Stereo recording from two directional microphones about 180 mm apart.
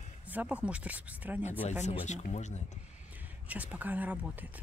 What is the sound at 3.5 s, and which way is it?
Speech, 10° right (ahead or behind).